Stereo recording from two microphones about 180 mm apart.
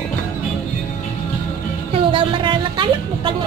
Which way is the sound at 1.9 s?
30° right (ahead or behind).